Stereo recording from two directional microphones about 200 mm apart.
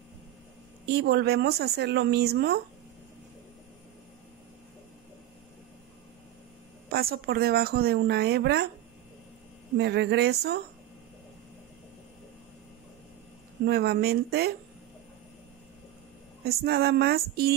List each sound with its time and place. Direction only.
0.9 s speech: 55° right (ahead or behind)
6.9 s speech: 50° right (ahead or behind)
9.8 s speech: 55° right (ahead or behind)
13.7 s speech: 50° right (ahead or behind)
16.4 s speech: 50° right (ahead or behind)